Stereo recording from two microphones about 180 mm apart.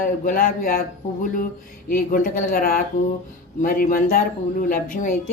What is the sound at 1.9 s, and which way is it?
Speech, 50° left (ahead or behind).